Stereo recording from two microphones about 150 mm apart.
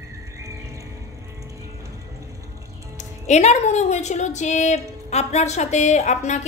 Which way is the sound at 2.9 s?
50° left (ahead or behind).